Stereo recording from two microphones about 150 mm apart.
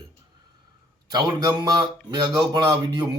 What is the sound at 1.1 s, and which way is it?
Speech, 25° right (ahead or behind).